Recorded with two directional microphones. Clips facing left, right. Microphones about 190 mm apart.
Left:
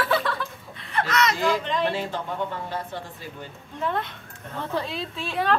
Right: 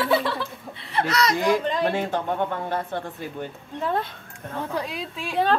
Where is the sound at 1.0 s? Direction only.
35° right (ahead or behind); by 3.5 s 55° right (ahead or behind).